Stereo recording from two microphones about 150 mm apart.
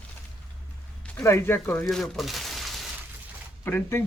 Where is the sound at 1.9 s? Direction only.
Centre (ahead or behind).